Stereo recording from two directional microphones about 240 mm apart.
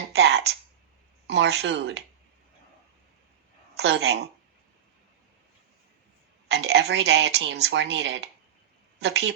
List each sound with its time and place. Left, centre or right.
0.1 s a sound: right
1.3 s speech: right
3.8 s speech: right
6.5 s a woman's voice: right